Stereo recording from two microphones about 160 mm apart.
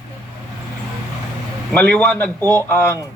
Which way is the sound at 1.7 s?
10° left (ahead or behind).